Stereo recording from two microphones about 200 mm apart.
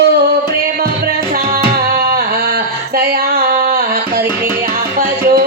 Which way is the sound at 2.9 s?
50° right (ahead or behind).